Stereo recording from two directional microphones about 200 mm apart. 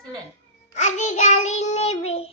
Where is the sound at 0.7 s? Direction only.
35° left (ahead or behind).